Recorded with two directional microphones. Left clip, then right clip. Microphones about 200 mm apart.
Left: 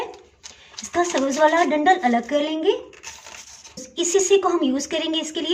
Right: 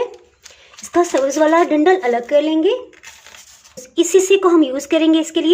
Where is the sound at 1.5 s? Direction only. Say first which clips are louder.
Right 2 dB; 45° right (ahead or behind).